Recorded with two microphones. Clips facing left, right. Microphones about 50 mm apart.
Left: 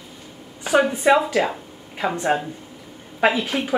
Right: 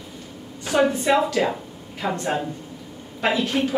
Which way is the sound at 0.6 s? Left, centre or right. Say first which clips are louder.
Left 3 dB; centre.